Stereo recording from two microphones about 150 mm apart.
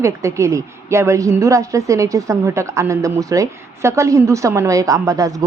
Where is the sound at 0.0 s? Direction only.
20° right (ahead or behind).